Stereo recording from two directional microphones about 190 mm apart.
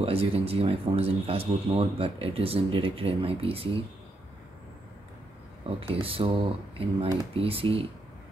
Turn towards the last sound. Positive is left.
turn(degrees=-30)  # may be behind; listen again after turning